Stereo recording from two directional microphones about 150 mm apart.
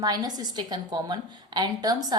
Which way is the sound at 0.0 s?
25° right (ahead or behind).